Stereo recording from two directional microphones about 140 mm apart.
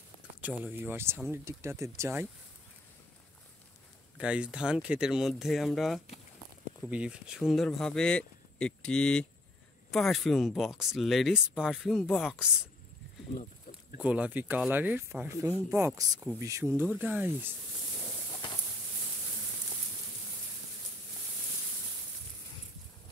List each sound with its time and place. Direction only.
0.4 s speech: 10° right (ahead or behind)
4.2 s speech: 5° right (ahead or behind)
13.9 s speech: 10° right (ahead or behind)